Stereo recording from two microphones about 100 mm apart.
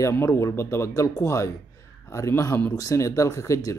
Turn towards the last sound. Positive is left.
turn(degrees=35)  # may be behind; listen again after turning